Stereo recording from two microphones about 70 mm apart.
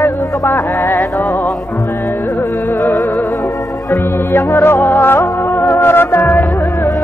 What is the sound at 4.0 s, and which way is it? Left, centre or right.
Music, left.